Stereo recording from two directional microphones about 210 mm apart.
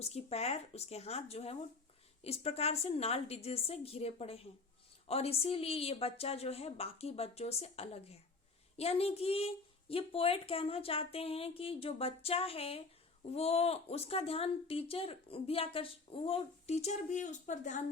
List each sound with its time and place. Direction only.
0.0 s speech: 30° left (ahead or behind)